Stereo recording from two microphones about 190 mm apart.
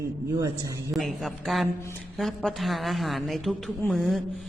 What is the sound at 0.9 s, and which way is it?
A man's voice, centre (ahead or behind).